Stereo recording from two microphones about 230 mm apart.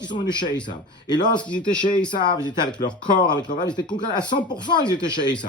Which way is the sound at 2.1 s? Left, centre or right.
Centre.